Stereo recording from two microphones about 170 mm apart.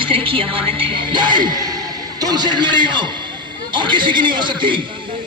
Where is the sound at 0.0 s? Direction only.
30° right (ahead or behind).